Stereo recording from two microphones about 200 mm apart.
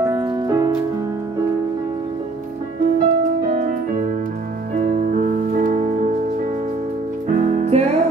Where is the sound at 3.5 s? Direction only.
40° right (ahead or behind).